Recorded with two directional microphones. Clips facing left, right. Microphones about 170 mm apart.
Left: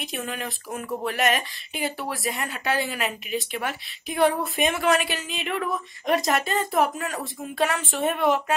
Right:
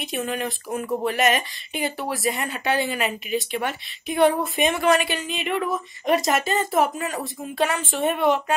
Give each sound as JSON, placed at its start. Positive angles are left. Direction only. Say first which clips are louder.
{"t": 0.0, "sound": "a woman's voice", "louder": "right 5 dB", "side_deg": 0}